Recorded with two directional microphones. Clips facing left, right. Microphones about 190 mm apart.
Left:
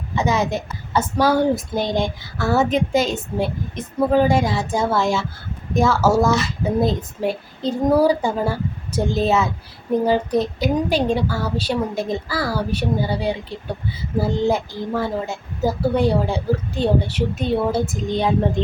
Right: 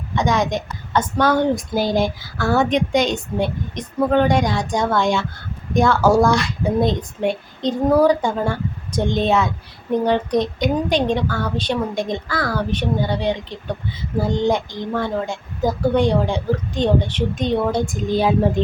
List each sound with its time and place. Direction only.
0.2 s a woman's voice: 5° left (ahead or behind)
1.7 s a woman's voice: 5° right (ahead or behind)